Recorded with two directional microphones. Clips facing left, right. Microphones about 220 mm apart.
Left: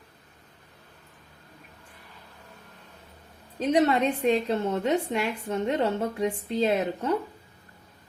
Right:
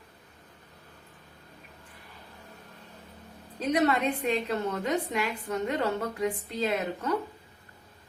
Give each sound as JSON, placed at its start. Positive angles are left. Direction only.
{"t": 3.7, "sound": "a woman's voice", "side_deg": 30}